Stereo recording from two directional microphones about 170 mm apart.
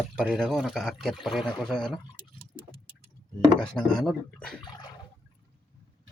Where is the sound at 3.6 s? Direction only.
5° left (ahead or behind).